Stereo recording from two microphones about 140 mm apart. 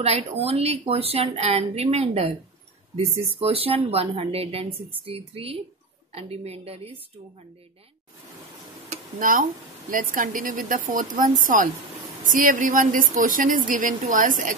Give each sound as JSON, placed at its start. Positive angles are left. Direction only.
{"t": 0.0, "sound": "speech", "side_deg": -45}
{"t": 9.2, "sound": "speech", "side_deg": -80}